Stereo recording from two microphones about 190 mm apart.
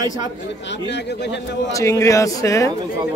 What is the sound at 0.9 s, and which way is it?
Speech, 65° left (ahead or behind).